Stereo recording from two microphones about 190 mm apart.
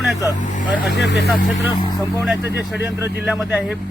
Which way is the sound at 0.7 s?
65° left (ahead or behind).